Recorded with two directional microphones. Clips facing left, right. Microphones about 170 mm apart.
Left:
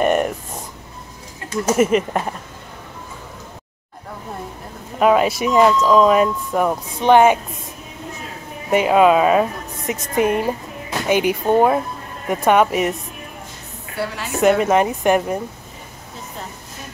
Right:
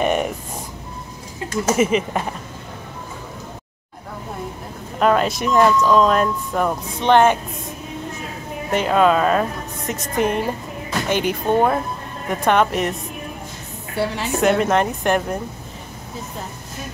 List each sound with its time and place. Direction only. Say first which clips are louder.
0.0 s a sound: left 2 dB; centre (ahead or behind)
1.8 s speech: left 3 dB; centre (ahead or behind)
4.9 s speech: left 2 dB; 5° left (ahead or behind)
8.6 s speech: left 3 dB; 10° left (ahead or behind)
13.9 s a woman's voice: right 3 dB; 25° right (ahead or behind)
14.4 s speech: left 3 dB; 5° left (ahead or behind)